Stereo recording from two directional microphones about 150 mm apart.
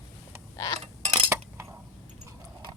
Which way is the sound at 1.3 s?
20° right (ahead or behind).